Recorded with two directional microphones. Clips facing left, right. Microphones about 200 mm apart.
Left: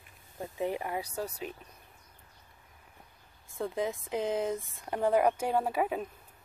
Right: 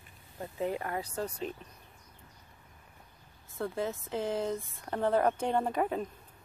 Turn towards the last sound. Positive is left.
turn(degrees=10)  # may be behind; listen again after turning